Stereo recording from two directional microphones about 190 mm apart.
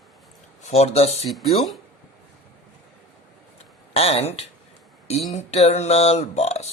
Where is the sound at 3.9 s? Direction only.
30° left (ahead or behind).